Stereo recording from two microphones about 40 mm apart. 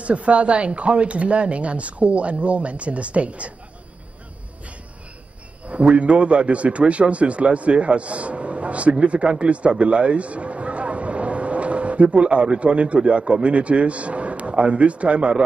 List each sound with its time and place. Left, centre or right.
0.0 s speech: right
5.7 s speech: right